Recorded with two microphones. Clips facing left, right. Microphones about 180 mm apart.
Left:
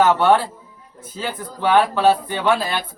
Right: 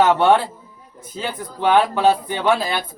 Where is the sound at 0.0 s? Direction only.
15° right (ahead or behind).